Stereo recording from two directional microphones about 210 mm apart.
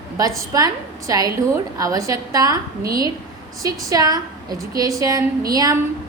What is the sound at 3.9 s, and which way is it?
A woman's voice, 15° right (ahead or behind).